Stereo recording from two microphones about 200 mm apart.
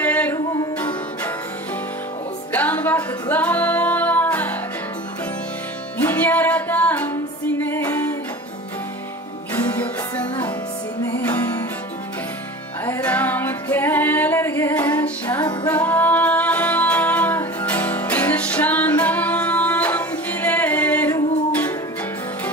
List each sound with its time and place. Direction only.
0.0 s music: 10° left (ahead or behind)
0.3 s music: 20° left (ahead or behind)
0.8 s music: 10° left (ahead or behind)
2.5 s music: 10° left (ahead or behind)
6.0 s music: 10° left (ahead or behind)
9.5 s music: 10° left (ahead or behind)
12.8 s music: 10° left (ahead or behind)